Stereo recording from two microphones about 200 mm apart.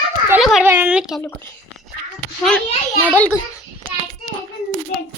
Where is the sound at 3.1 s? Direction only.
5° left (ahead or behind).